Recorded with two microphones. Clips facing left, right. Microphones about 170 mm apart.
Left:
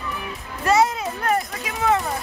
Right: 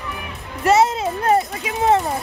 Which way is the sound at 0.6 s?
25° right (ahead or behind).